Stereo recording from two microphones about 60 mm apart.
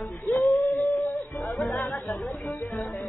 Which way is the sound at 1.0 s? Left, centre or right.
Left.